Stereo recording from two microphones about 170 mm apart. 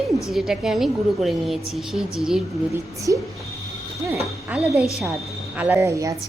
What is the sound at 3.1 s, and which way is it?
Speech, 15° right (ahead or behind).